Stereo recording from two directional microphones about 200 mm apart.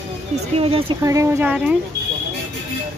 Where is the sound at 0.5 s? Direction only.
30° right (ahead or behind).